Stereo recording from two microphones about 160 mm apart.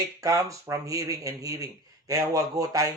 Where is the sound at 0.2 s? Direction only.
20° right (ahead or behind).